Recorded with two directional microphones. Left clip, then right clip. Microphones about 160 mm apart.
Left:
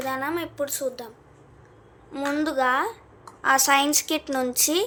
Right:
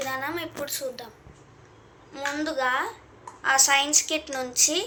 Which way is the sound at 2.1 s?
70° left (ahead or behind).